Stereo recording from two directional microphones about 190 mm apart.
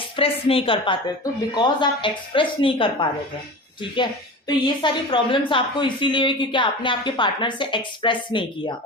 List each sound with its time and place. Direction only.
0.2 s a woman's voice: 30° left (ahead or behind)
4.4 s a woman's voice: 25° left (ahead or behind)